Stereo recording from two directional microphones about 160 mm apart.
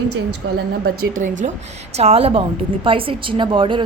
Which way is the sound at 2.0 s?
40° right (ahead or behind).